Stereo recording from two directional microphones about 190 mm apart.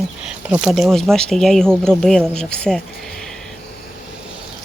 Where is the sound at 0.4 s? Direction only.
5° right (ahead or behind).